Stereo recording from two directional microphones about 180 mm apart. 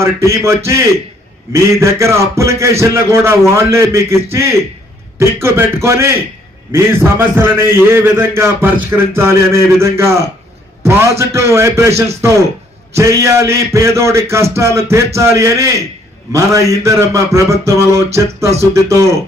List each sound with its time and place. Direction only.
0.0 s a man's voice: 15° right (ahead or behind)